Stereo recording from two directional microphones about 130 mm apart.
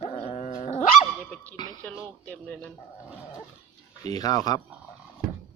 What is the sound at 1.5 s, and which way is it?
Speech, 30° left (ahead or behind).